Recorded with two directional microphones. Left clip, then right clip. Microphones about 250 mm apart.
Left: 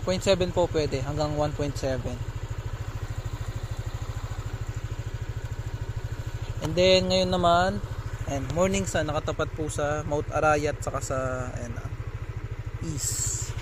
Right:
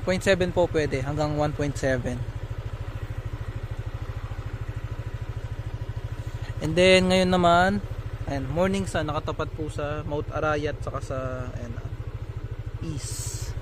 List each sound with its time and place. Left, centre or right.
0.0 s speech: centre
6.7 s speech: right
8.3 s speech: centre
12.8 s a sound: centre